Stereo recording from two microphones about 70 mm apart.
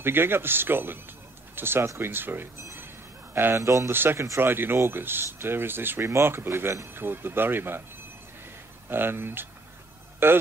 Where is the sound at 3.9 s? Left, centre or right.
Right.